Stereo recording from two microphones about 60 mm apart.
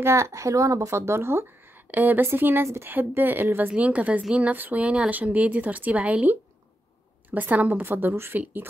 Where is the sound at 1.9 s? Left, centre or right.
Right.